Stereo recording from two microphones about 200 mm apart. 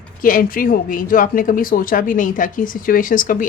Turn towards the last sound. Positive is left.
turn(degrees=40)  # may be behind; listen again after turning